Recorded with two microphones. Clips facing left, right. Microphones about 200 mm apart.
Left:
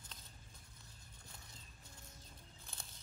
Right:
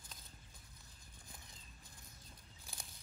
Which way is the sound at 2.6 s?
15° right (ahead or behind).